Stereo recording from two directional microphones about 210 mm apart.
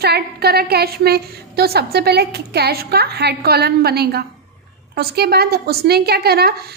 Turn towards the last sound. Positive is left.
turn(degrees=-50)  # may be behind; listen again after turning